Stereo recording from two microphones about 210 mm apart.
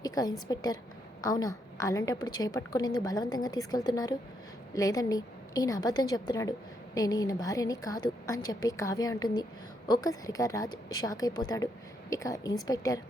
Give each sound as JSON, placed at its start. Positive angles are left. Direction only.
{"t": 0.0, "sound": "a woman's voice", "side_deg": 15}